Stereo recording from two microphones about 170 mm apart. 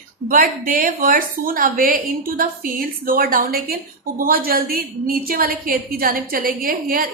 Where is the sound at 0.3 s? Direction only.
55° right (ahead or behind).